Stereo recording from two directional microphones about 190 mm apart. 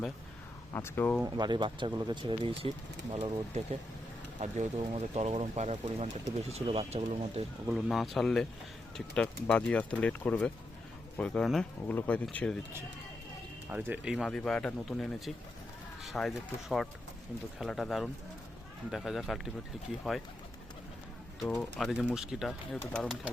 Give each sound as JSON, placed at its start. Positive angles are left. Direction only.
{"t": 0.7, "sound": "speech", "side_deg": 15}
{"t": 1.2, "sound": "speech", "side_deg": -25}
{"t": 7.7, "sound": "speech", "side_deg": 0}
{"t": 13.7, "sound": "speech", "side_deg": -10}
{"t": 21.4, "sound": "speech", "side_deg": 5}